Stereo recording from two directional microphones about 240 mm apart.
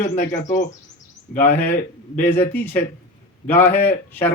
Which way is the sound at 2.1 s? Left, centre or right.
Centre.